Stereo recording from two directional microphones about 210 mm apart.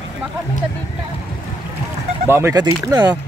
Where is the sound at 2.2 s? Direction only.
10° right (ahead or behind).